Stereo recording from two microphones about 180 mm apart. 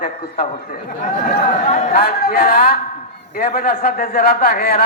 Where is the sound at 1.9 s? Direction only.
55° left (ahead or behind).